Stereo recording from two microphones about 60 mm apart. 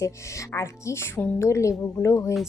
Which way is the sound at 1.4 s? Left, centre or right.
Left.